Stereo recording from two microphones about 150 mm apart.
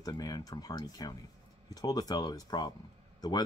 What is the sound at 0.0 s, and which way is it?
Speech, 25° left (ahead or behind).